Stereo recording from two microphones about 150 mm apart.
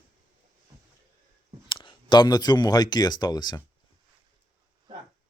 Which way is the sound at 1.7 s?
30° left (ahead or behind).